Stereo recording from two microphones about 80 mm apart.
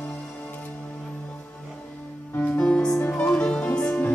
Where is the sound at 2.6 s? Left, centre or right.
Centre.